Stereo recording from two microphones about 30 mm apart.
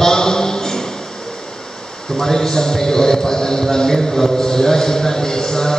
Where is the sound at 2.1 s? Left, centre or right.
Centre.